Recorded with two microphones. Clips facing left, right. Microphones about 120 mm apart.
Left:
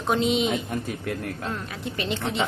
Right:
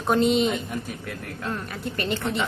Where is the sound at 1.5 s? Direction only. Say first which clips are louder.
Right 1 dB; centre (ahead or behind).